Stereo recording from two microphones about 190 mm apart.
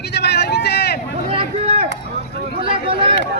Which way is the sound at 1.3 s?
30° right (ahead or behind).